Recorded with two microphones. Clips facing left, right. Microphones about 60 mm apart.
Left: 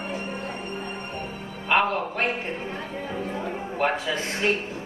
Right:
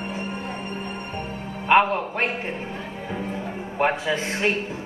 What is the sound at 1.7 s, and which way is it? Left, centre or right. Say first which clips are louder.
Speech: right 4 dB; right.